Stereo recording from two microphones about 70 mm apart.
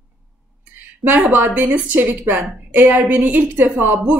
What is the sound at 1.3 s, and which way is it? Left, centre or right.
A woman's voice, right.